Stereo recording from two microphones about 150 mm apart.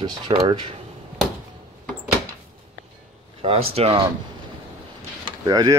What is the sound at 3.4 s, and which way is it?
Speech, 40° right (ahead or behind).